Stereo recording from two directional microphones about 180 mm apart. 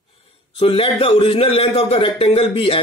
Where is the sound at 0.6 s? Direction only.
30° left (ahead or behind).